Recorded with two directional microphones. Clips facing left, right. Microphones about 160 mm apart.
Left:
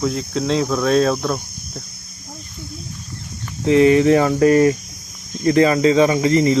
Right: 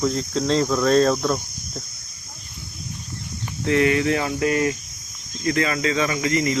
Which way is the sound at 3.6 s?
25° left (ahead or behind).